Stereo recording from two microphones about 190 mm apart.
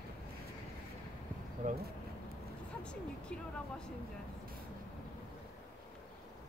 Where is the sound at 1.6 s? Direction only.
40° right (ahead or behind).